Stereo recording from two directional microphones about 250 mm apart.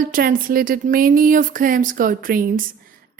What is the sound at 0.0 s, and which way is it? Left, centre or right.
A woman's voice, right.